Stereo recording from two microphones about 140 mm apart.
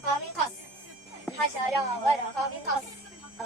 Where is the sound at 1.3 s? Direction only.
20° left (ahead or behind).